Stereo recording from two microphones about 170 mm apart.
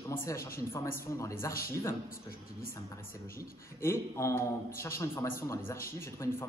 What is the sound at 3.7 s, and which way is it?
A man's voice, 15° left (ahead or behind).